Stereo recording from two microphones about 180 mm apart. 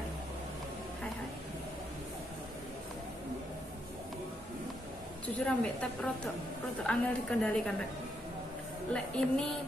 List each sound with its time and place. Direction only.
5.2 s a woman's voice: 5° left (ahead or behind)
8.9 s a woman's voice: 5° left (ahead or behind)